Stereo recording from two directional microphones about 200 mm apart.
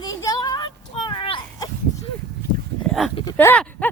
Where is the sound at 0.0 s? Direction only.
15° left (ahead or behind).